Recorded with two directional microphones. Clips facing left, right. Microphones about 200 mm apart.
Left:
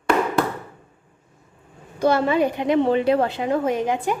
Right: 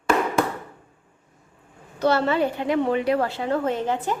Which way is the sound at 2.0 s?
10° left (ahead or behind).